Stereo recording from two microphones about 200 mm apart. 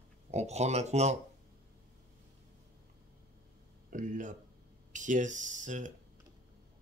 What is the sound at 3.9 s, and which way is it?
Speech, 40° right (ahead or behind).